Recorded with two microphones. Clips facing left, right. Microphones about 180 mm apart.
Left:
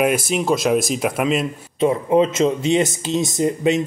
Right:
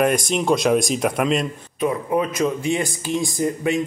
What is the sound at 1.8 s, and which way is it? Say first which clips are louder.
Speech: left 5 dB; 25° left (ahead or behind).